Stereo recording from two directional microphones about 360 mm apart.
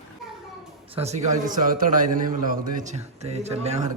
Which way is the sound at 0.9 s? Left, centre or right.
Centre.